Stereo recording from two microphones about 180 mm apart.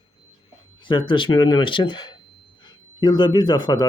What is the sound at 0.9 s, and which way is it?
Speech, 25° left (ahead or behind).